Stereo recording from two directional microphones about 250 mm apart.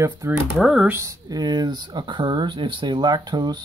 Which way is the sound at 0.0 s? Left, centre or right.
Centre.